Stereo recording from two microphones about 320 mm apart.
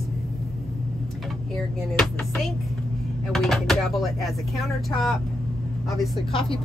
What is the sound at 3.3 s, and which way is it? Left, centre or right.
Speech, centre.